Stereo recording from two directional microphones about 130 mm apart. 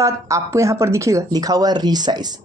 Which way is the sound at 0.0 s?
25° right (ahead or behind).